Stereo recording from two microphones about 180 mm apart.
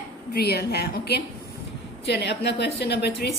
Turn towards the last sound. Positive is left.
turn(degrees=65)  # may be behind; listen again after turning